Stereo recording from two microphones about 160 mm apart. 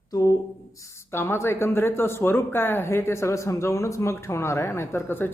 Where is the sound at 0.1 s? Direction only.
20° left (ahead or behind).